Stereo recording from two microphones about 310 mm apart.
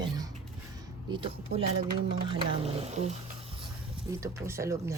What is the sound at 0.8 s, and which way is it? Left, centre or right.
Speech, centre.